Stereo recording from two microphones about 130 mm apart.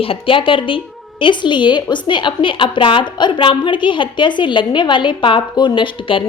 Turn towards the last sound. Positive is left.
turn(degrees=40)  # may be behind; listen again after turning